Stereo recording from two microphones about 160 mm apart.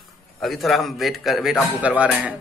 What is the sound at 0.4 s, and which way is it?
Speech, centre (ahead or behind).